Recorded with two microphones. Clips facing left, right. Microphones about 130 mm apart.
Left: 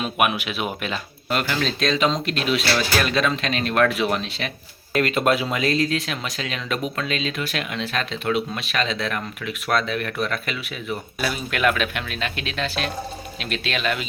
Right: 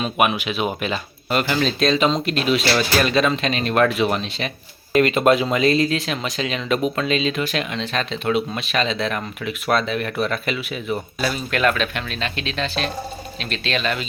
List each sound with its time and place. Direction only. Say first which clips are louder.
0.0 s speech: right 2 dB; centre (ahead or behind)